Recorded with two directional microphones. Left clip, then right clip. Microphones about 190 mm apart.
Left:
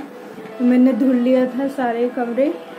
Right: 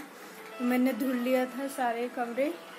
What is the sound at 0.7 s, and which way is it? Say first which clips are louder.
A man's voice: left 13 dB; centre (ahead or behind).